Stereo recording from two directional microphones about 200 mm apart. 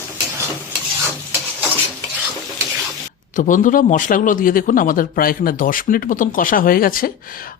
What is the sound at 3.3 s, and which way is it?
A man's voice, 40° left (ahead or behind).